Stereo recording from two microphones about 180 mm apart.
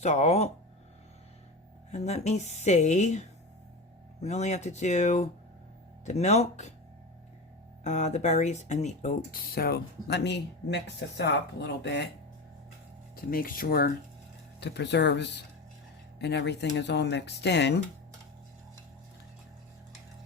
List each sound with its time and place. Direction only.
0.0 s speech: 40° left (ahead or behind)
1.9 s speech: 40° left (ahead or behind)
7.9 s speech: 40° left (ahead or behind); by 12.0 s 70° left (ahead or behind)
13.1 s speech: 55° left (ahead or behind)
14.6 s speech: 70° left (ahead or behind)